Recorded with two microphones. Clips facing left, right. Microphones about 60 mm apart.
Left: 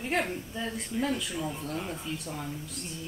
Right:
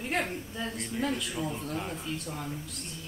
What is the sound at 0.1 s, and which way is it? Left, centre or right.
Speech, centre.